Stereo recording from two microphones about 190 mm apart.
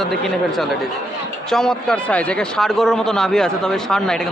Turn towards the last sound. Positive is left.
turn(degrees=5)  # may be behind; listen again after turning